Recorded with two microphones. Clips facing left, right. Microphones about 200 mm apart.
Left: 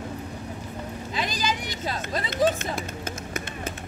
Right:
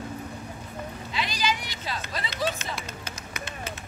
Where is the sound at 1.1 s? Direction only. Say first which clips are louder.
Even; 45° left (ahead or behind).